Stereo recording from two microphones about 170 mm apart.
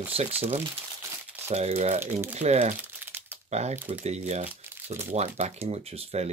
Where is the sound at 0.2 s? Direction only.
35° right (ahead or behind).